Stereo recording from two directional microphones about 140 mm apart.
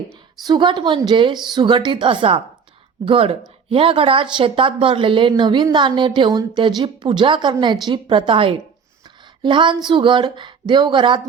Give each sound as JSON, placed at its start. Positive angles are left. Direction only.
{"t": 0.4, "sound": "a woman's voice", "side_deg": -30}